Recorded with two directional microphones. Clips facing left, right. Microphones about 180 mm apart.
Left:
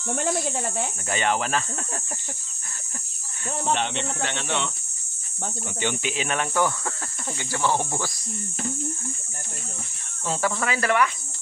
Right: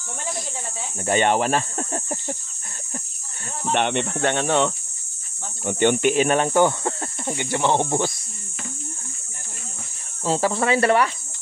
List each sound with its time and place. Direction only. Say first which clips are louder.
0.1 s speech: left 6 dB; 65° left (ahead or behind)
1.0 s speech: right 7 dB; 40° right (ahead or behind)
3.7 s speech: right 9 dB; 60° right (ahead or behind); by 4.7 s 45° right (ahead or behind)
5.7 s speech: right 12 dB; 55° right (ahead or behind)
6.3 s speech: right 6 dB; 30° right (ahead or behind)
10.2 s speech: right 5 dB; 30° right (ahead or behind)